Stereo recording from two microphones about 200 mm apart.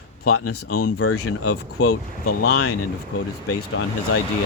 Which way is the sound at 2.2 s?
55° left (ahead or behind).